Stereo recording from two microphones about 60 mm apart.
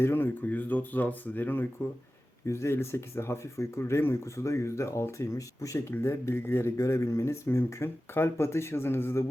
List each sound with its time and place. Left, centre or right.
0.0 s speech: left
2.5 s speech: left
5.9 s speech: left
6.7 s speech: left